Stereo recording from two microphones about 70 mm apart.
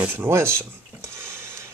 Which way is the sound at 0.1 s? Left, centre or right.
Right.